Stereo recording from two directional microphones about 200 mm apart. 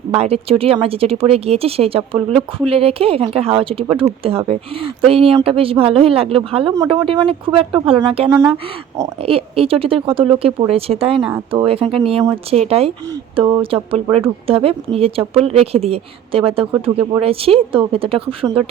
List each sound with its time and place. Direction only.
0.1 s speech: 30° right (ahead or behind)
11.2 s speech: 10° right (ahead or behind)
11.5 s speech: 25° right (ahead or behind)